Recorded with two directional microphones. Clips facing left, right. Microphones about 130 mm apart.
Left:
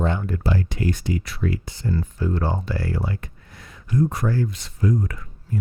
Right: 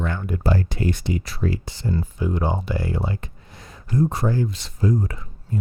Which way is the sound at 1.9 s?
20° right (ahead or behind).